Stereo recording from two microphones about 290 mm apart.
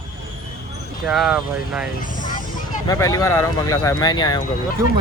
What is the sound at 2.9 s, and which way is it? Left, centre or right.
Speech, centre.